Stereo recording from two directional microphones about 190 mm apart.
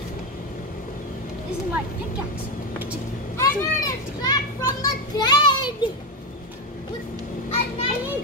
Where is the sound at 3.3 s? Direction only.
15° left (ahead or behind).